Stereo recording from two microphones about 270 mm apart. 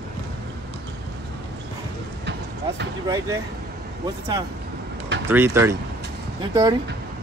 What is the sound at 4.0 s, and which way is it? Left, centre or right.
Speech, centre.